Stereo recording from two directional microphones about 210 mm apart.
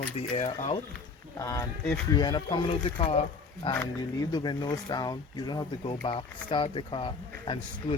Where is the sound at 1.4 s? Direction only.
15° left (ahead or behind).